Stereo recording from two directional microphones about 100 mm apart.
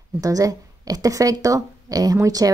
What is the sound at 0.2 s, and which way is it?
Speech, 35° right (ahead or behind).